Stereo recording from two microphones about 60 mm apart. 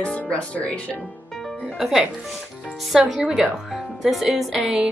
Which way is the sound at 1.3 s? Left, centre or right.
Centre.